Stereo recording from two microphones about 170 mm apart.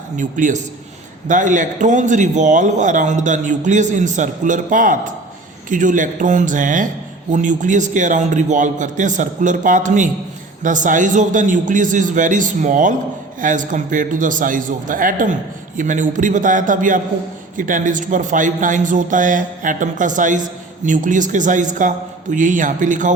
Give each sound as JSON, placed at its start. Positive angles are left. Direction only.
{"t": 0.2, "sound": "a man's voice", "side_deg": -50}